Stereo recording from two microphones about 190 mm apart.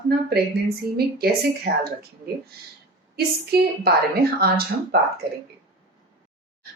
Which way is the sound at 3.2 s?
55° right (ahead or behind).